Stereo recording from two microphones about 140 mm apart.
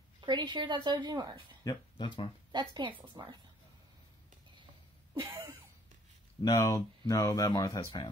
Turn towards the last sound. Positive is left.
turn(degrees=30)  # may be behind; listen again after turning